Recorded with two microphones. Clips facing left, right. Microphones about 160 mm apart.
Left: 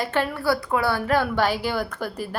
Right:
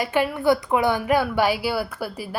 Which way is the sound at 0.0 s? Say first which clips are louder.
Right 3 dB; 10° right (ahead or behind).